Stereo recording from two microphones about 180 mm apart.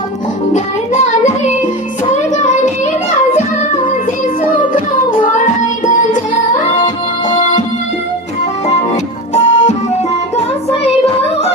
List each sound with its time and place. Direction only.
0.5 s music: 40° left (ahead or behind)
2.1 s child singing: 40° left (ahead or behind)
5.2 s music: 45° left (ahead or behind)
9.3 s music: 40° left (ahead or behind)